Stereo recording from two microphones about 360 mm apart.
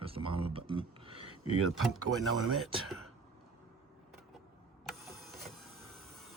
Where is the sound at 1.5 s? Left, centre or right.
Right.